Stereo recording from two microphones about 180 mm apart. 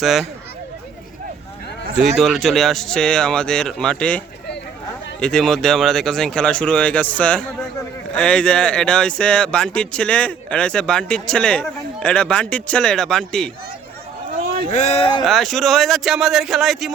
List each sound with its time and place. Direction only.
0.0 s speech: centre (ahead or behind)
2.0 s speech: centre (ahead or behind)
5.2 s speech: 5° left (ahead or behind)
14.7 s speech: 40° left (ahead or behind)
15.2 s speech: centre (ahead or behind)